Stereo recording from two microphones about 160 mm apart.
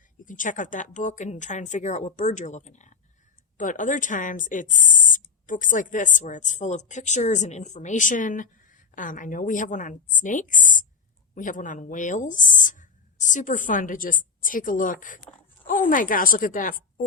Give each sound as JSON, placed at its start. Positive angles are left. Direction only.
{"t": 0.3, "sound": "a woman's voice", "side_deg": 55}